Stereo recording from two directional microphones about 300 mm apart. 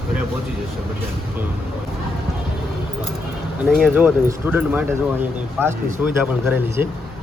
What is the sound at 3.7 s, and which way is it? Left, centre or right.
Speech, centre.